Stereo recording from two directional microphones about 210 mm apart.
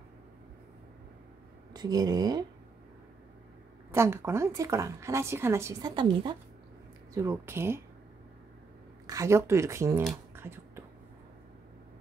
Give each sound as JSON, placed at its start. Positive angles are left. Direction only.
{"t": 1.7, "sound": "speech", "side_deg": -20}
{"t": 3.9, "sound": "speech", "side_deg": -10}
{"t": 9.0, "sound": "speech", "side_deg": -15}
{"t": 10.3, "sound": "a sound", "side_deg": -10}